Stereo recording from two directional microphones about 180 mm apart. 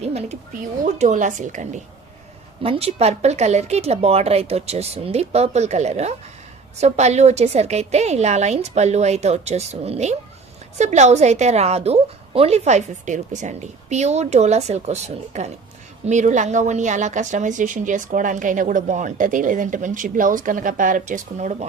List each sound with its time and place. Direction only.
0.0 s a woman's voice: 35° right (ahead or behind)